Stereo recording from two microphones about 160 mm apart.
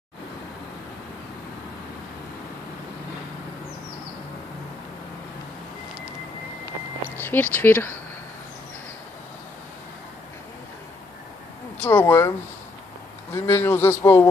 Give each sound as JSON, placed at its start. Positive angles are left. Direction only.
{"t": 7.2, "sound": "speech", "side_deg": 10}
{"t": 11.8, "sound": "speech", "side_deg": 15}